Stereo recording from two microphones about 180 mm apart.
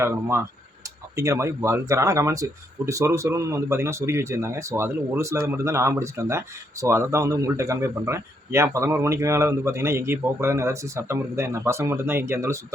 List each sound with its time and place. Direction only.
0.0 s speech: 15° right (ahead or behind)